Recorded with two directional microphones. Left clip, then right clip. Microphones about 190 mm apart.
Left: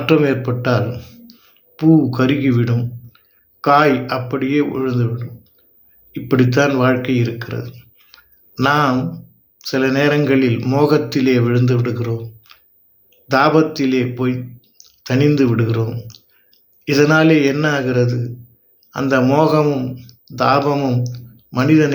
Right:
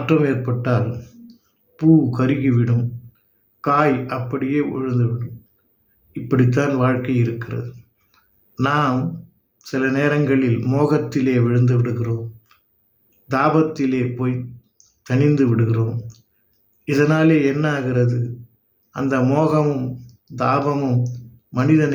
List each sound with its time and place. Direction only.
0.0 s speech: 15° right (ahead or behind)